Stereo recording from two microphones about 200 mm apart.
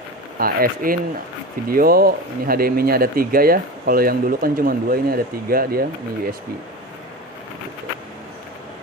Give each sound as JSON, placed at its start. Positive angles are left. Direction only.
{"t": 0.4, "sound": "speech", "side_deg": -45}